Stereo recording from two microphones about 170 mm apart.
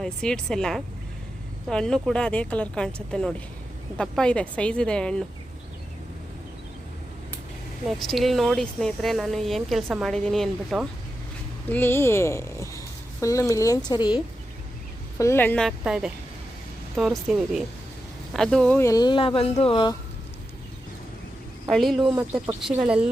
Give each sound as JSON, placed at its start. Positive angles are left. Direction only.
{"t": 0.0, "sound": "speech", "side_deg": 5}
{"t": 8.0, "sound": "speech", "side_deg": 0}
{"t": 11.7, "sound": "speech", "side_deg": 15}
{"t": 15.2, "sound": "speech", "side_deg": 15}
{"t": 18.8, "sound": "speech", "side_deg": 20}
{"t": 21.7, "sound": "speech", "side_deg": 0}